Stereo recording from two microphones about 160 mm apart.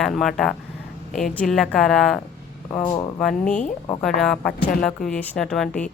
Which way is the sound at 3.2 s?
5° left (ahead or behind).